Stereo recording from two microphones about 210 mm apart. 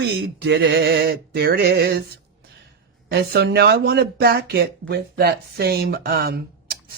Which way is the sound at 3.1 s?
50° right (ahead or behind).